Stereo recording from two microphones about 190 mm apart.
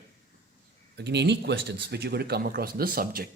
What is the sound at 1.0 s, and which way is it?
Speech, 65° right (ahead or behind).